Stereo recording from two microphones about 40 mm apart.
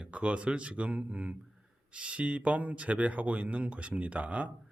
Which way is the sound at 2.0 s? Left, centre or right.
Right.